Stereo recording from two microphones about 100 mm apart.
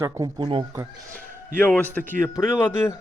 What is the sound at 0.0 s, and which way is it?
Speech, 30° right (ahead or behind).